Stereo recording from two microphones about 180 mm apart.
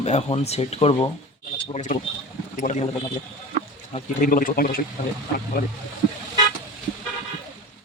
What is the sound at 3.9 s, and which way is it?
Speech, 45° left (ahead or behind).